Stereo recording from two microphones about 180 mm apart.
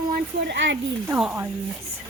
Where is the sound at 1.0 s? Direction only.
10° right (ahead or behind).